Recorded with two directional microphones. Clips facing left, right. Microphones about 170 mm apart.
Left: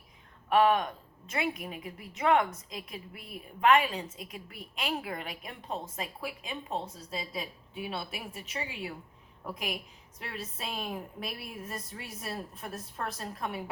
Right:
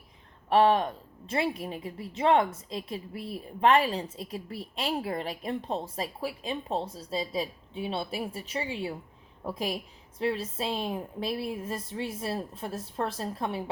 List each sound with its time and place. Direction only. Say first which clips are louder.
0.5 s a woman's voice: right 2 dB; 30° right (ahead or behind)